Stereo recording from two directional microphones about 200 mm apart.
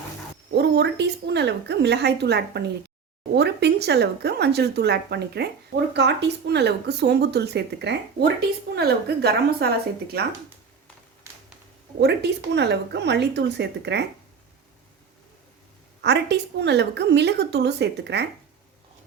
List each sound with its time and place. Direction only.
0.5 s a woman's voice: 60° right (ahead or behind)
11.3 s a sound: 15° right (ahead or behind)
11.9 s speech: 60° right (ahead or behind)
16.0 s speech: 60° right (ahead or behind)